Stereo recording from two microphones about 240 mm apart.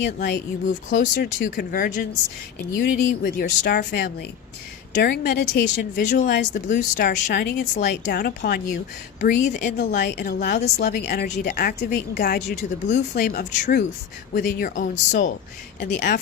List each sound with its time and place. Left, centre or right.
0.2 s speech: left
3.2 s speech: left
6.1 s speech: left
6.3 s speech: left
6.7 s speech: left
12.5 s speech: left